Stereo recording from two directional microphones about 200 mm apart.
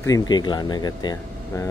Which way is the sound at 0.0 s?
20° left (ahead or behind).